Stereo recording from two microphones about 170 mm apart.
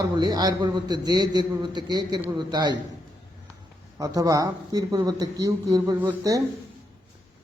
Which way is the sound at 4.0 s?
20° right (ahead or behind).